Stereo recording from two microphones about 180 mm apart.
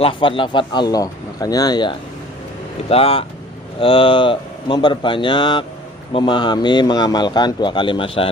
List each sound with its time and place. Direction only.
0.0 s speech: 30° left (ahead or behind)